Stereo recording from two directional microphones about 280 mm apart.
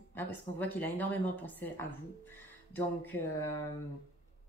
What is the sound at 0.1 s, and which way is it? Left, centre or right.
Speech, centre.